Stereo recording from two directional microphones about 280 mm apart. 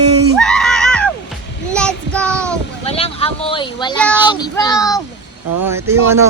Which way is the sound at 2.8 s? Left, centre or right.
Left.